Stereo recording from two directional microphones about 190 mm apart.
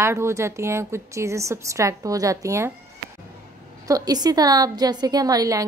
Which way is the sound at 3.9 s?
20° right (ahead or behind).